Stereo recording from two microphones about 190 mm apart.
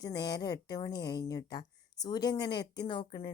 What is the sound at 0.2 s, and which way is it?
A woman's voice, 20° left (ahead or behind).